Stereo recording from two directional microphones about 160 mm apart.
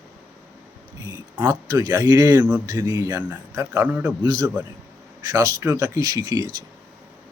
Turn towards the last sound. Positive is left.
turn(degrees=-25)  # may be behind; listen again after turning